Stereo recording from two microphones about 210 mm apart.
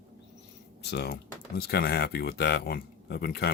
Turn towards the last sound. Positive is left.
turn(degrees=50)  # may be behind; listen again after turning